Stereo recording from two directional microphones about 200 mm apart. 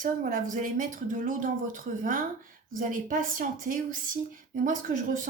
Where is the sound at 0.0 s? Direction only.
45° right (ahead or behind).